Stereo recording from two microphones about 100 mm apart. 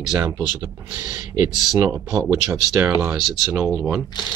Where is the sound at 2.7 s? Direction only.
15° right (ahead or behind).